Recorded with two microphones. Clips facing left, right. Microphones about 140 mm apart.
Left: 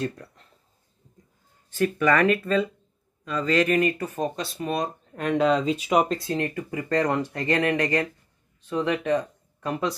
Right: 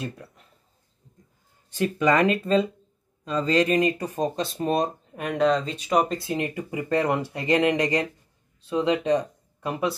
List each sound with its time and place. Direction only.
1.7 s speech: 20° right (ahead or behind)
5.1 s speech: 5° right (ahead or behind)
6.2 s speech: 15° right (ahead or behind)